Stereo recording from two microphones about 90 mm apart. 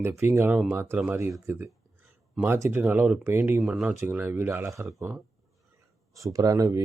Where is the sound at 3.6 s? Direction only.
5° right (ahead or behind).